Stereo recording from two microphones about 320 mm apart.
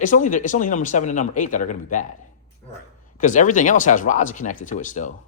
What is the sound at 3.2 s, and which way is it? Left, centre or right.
Speech, left.